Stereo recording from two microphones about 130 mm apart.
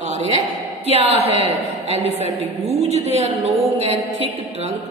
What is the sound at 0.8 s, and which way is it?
A woman's voice, 50° right (ahead or behind).